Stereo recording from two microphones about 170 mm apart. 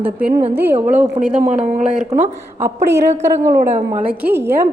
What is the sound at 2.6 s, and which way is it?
Speech, 15° right (ahead or behind).